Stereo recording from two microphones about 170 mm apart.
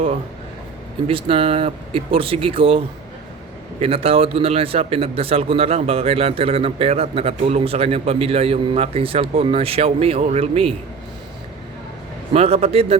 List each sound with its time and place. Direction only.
1.0 s speech: 30° right (ahead or behind)
12.3 s speech: 35° right (ahead or behind)